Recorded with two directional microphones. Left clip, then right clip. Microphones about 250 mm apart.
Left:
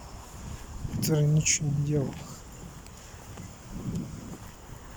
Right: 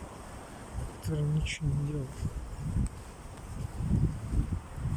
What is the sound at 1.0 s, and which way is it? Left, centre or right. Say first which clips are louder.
Speech: left 9 dB; centre.